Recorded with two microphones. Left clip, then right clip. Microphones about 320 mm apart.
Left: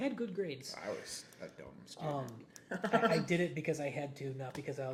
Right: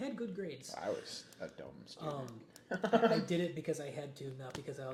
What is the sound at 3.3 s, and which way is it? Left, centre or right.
Speech, left.